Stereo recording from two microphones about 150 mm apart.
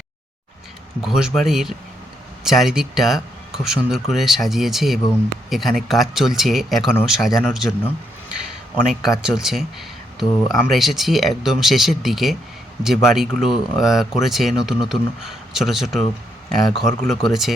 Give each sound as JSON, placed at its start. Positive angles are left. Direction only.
{"t": 1.0, "sound": "speech", "side_deg": 0}
{"t": 8.7, "sound": "speech", "side_deg": -5}